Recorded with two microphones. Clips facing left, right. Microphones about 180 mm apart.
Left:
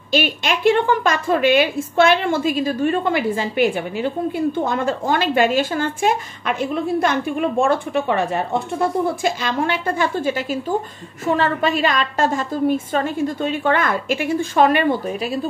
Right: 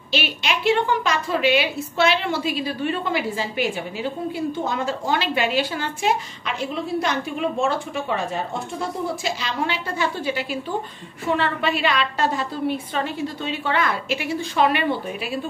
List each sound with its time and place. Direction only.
0.1 s a woman's voice: 50° left (ahead or behind)